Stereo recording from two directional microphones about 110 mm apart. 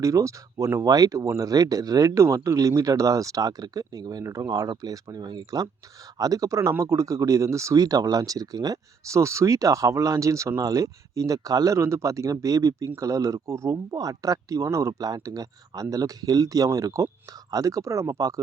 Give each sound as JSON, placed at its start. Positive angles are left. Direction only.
{"t": 0.0, "sound": "speech", "side_deg": -30}